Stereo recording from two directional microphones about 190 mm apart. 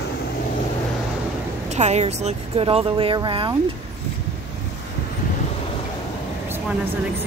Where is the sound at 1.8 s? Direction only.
35° right (ahead or behind).